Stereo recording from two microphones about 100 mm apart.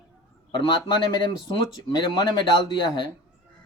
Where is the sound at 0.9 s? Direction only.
45° left (ahead or behind).